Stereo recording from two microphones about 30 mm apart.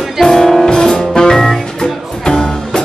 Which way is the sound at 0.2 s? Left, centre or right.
Centre.